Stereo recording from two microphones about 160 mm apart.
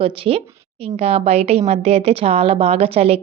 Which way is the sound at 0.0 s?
40° right (ahead or behind).